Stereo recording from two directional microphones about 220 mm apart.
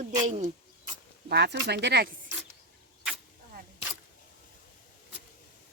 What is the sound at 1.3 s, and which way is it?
Speech, 50° right (ahead or behind).